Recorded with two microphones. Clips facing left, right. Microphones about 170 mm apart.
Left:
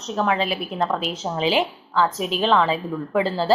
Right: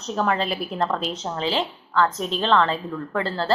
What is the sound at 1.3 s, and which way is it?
Speech, 15° left (ahead or behind).